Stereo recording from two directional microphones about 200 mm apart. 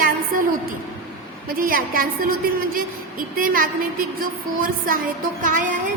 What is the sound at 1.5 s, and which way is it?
A woman's voice, 45° right (ahead or behind).